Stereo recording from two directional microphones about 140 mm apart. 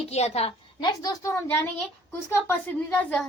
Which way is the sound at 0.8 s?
30° left (ahead or behind).